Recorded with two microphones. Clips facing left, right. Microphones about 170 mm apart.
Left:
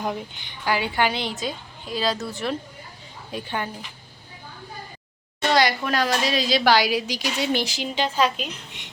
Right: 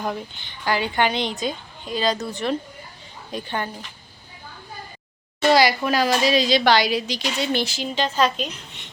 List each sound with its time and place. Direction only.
0.0 s a woman's voice: 10° left (ahead or behind)
5.4 s a woman's voice: 5° right (ahead or behind); by 8.9 s 10° left (ahead or behind)